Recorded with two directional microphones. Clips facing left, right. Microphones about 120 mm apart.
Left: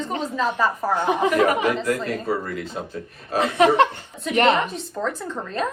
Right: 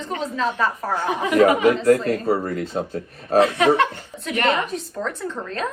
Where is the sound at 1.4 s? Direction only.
35° right (ahead or behind).